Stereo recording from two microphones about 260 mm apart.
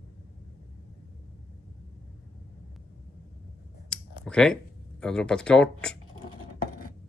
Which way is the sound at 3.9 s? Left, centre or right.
Centre.